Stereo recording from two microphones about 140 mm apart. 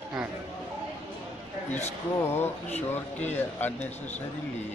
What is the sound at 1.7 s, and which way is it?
Speech, 15° left (ahead or behind).